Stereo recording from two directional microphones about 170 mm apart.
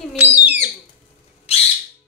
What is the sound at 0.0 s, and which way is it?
Bird, 10° right (ahead or behind).